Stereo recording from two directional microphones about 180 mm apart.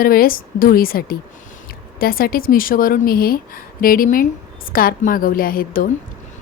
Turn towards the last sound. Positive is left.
turn(degrees=50)  # may be behind; listen again after turning